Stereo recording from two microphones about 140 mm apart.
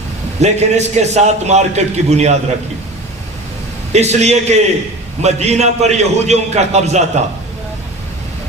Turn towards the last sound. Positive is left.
turn(degrees=-50)  # may be behind; listen again after turning